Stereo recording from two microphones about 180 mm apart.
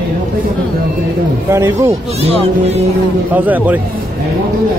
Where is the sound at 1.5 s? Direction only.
15° right (ahead or behind).